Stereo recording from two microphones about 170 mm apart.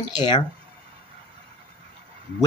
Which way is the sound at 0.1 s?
25° left (ahead or behind).